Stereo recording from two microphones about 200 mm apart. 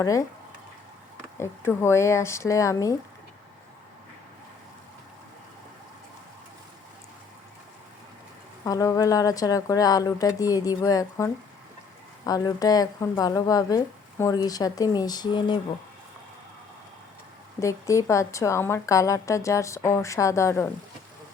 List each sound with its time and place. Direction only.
0.0 s a woman's voice: 15° left (ahead or behind)
1.4 s a woman's voice: 15° left (ahead or behind)
8.6 s a woman's voice: 15° left (ahead or behind)
17.6 s a woman's voice: 15° left (ahead or behind)